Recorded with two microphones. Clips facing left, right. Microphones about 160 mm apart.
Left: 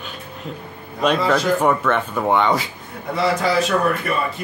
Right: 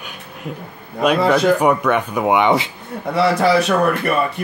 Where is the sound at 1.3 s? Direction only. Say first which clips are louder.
Right 4 dB; 15° right (ahead or behind).